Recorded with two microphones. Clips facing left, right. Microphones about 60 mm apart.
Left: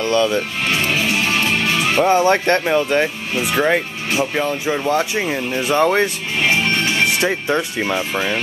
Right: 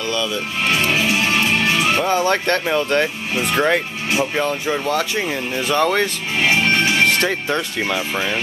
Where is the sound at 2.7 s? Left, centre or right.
Centre.